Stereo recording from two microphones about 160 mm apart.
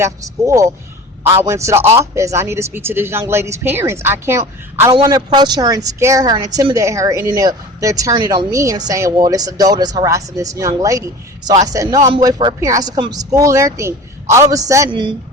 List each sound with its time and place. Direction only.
0.0 s a man's voice: 20° right (ahead or behind)
14.8 s a woman's voice: 30° right (ahead or behind)